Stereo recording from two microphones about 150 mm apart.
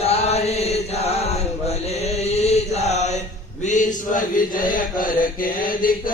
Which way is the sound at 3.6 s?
60° left (ahead or behind).